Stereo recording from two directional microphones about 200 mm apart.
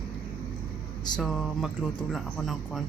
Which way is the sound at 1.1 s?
Centre (ahead or behind).